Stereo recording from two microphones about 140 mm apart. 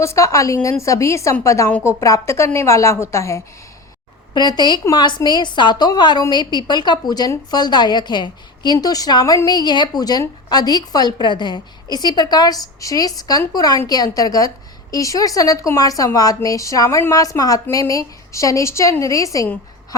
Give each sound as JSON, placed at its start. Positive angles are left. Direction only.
{"t": 0.0, "sound": "a woman's voice", "side_deg": 20}
{"t": 4.4, "sound": "a woman's voice", "side_deg": 30}